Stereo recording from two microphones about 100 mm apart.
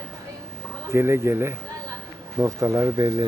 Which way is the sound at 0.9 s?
25° right (ahead or behind).